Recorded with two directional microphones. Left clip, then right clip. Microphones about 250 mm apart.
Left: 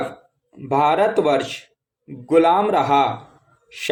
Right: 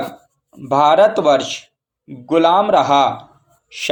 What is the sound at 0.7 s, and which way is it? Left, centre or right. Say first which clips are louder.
A man's voice: right 5 dB; centre.